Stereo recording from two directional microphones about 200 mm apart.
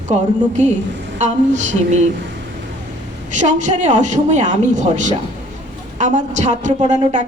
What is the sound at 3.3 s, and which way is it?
A woman's voice, 35° right (ahead or behind).